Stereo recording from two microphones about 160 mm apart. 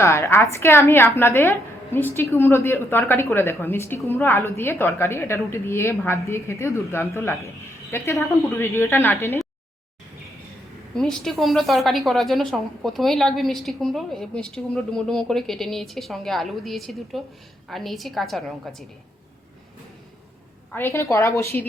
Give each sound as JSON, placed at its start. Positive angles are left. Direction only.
{"t": 0.0, "sound": "a woman's voice", "side_deg": 15}
{"t": 10.9, "sound": "a woman's voice", "side_deg": 5}
{"t": 20.7, "sound": "a woman's voice", "side_deg": 15}